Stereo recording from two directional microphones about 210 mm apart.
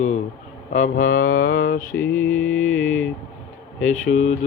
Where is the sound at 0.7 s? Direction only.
35° left (ahead or behind).